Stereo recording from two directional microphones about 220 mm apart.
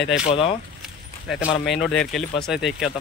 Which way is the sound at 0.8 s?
Centre (ahead or behind).